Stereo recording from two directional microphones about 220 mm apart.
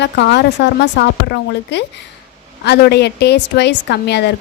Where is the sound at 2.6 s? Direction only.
50° left (ahead or behind).